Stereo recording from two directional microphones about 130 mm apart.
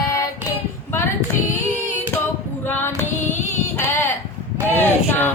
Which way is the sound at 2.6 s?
15° left (ahead or behind).